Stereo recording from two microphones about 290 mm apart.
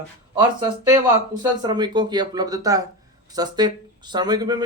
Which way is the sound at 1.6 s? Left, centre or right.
Centre.